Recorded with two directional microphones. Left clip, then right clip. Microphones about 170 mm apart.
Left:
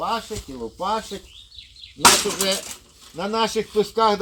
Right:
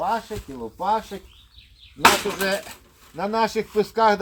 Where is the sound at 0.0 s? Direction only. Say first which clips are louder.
Right 1 dB; 5° left (ahead or behind).